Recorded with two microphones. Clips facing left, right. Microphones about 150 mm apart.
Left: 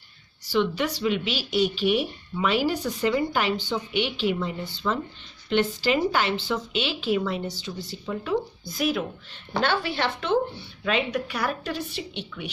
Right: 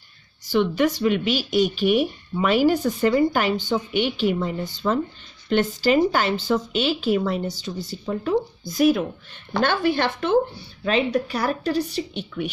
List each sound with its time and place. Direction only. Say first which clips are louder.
0.5 s speech: right 4 dB; 50° right (ahead or behind)
10.8 s speech: right 5 dB; 30° right (ahead or behind)